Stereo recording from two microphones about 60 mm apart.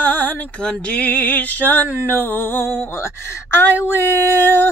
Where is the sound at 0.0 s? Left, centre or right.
Left.